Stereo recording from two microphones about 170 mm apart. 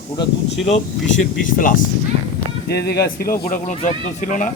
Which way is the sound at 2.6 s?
70° left (ahead or behind).